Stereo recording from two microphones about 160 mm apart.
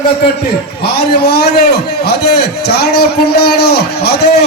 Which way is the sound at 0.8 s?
90° left.